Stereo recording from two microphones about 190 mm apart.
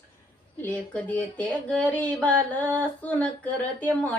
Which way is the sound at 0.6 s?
10° left (ahead or behind).